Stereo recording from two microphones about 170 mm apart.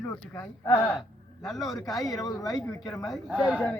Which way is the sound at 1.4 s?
Centre (ahead or behind).